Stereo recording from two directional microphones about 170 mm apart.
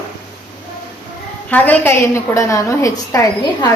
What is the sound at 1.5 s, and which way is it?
A woman's voice, 10° left (ahead or behind).